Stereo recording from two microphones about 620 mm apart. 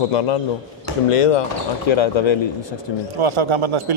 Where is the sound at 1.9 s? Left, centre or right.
Left.